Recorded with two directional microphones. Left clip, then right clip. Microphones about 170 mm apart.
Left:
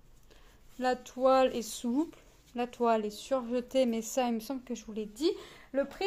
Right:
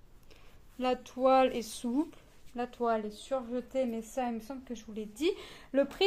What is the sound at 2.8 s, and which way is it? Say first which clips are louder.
A woman's voice: left 3 dB; 35° left (ahead or behind).